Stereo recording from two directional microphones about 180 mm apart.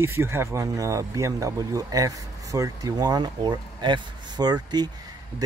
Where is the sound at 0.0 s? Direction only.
15° right (ahead or behind).